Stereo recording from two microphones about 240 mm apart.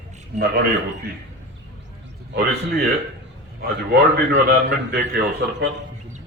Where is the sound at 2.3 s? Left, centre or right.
Right.